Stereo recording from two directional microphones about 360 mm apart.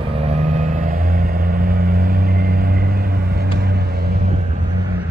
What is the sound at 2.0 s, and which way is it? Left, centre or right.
Vehicle, right.